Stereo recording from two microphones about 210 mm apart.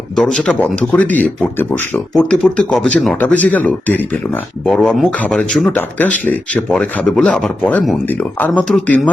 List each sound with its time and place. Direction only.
0.2 s speech: centre (ahead or behind)